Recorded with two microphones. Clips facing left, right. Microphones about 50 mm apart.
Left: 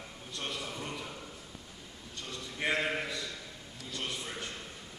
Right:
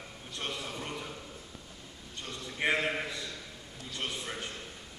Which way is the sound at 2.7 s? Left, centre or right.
Centre.